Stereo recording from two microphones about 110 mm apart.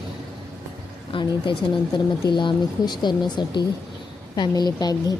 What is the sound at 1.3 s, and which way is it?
A woman's voice, 45° left (ahead or behind).